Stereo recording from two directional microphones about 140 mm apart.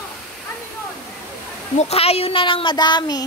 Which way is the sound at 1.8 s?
45° left (ahead or behind).